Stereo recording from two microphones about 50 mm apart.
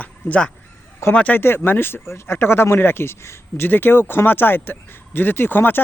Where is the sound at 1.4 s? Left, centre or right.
Left.